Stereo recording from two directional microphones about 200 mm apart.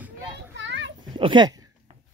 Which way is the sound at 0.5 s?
65° right (ahead or behind).